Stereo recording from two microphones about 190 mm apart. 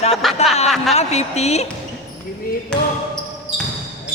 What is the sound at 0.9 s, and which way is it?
Speech, 35° left (ahead or behind).